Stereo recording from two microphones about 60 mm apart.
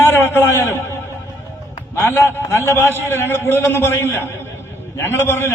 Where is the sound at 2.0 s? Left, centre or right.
Left.